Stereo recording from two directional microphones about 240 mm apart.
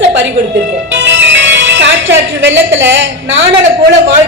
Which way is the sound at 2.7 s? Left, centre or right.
Right.